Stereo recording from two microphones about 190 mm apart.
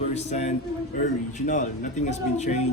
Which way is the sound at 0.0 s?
35° left (ahead or behind).